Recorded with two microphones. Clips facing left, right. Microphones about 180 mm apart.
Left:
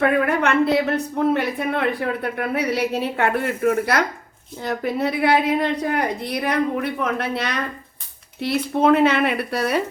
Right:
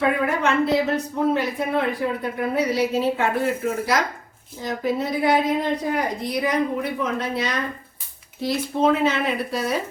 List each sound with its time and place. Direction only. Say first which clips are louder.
0.0 s a woman's voice: left 2 dB; 65° left (ahead or behind)